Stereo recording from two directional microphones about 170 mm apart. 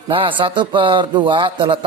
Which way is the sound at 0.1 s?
30° right (ahead or behind).